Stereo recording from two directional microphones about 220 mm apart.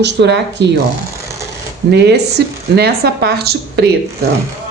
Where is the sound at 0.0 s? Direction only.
50° right (ahead or behind).